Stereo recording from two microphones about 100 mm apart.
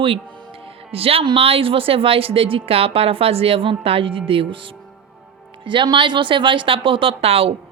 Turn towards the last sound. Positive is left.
turn(degrees=-75)  # may be behind; listen again after turning